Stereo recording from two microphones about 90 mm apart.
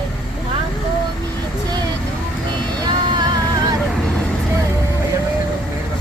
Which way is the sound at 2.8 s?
50° right (ahead or behind).